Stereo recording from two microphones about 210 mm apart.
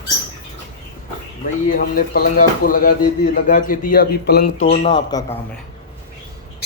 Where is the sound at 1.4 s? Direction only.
40° left (ahead or behind).